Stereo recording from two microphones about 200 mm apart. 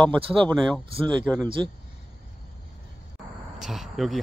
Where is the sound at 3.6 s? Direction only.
Centre (ahead or behind).